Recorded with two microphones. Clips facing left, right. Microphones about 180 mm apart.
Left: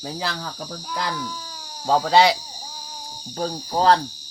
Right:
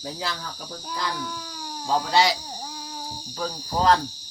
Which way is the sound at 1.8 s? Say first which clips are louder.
Left 5 dB; 65° left (ahead or behind).